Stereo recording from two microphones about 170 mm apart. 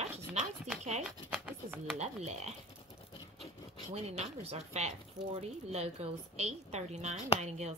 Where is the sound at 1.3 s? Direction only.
5° right (ahead or behind).